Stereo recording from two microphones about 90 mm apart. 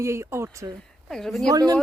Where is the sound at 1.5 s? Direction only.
45° right (ahead or behind).